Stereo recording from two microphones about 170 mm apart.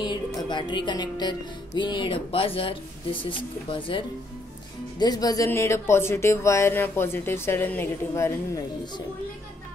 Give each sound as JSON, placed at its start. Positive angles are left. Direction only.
{"t": 0.0, "sound": "music", "side_deg": 25}
{"t": 4.9, "sound": "speech", "side_deg": 25}